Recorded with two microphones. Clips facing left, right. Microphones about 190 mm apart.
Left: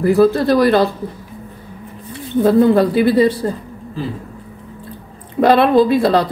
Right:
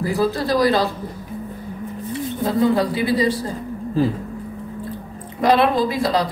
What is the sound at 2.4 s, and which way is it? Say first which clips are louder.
Speech: left 7 dB; 60° left (ahead or behind).